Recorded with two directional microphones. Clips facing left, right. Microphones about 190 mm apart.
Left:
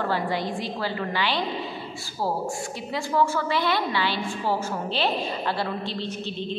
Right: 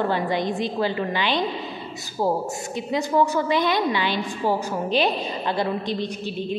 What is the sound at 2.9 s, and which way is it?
A woman's voice, 20° right (ahead or behind).